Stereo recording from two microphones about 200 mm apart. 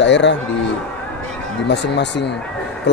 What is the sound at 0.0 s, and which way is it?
Speech, 65° left (ahead or behind).